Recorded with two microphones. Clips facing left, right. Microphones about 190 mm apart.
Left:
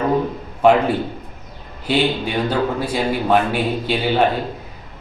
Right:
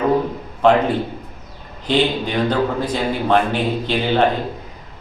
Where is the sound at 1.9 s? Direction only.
10° left (ahead or behind).